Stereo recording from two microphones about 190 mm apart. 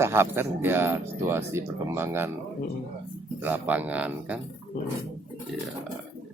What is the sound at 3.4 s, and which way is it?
Speech, 10° right (ahead or behind).